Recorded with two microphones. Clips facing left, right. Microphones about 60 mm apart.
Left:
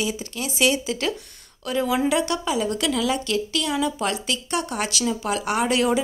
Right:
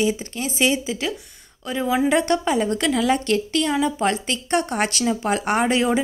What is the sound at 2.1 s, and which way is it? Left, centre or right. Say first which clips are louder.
A woman's voice: right 3 dB; right.